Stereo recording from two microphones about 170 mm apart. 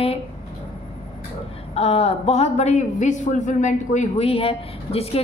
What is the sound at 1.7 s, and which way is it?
A woman's voice, 35° left (ahead or behind).